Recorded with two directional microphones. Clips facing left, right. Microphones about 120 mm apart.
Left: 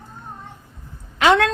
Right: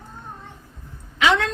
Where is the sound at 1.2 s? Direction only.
55° left (ahead or behind).